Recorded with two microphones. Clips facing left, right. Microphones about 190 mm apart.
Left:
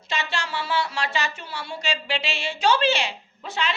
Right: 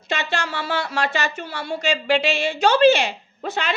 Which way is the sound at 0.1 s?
50° right (ahead or behind).